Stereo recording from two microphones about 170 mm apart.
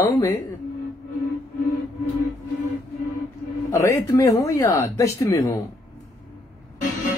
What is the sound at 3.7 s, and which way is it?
Speech, 20° left (ahead or behind).